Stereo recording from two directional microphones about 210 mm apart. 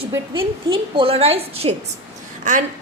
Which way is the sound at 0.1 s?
25° right (ahead or behind).